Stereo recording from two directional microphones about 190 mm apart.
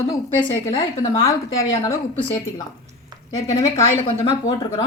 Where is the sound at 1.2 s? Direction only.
15° left (ahead or behind).